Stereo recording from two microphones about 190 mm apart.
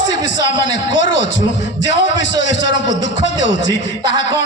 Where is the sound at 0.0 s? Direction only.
75° left (ahead or behind).